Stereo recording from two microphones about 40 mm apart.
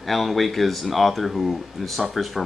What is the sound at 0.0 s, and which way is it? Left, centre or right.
Speech, centre.